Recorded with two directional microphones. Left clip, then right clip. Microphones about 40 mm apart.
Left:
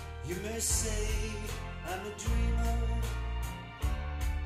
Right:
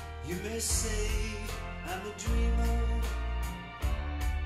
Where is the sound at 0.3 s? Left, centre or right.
Right.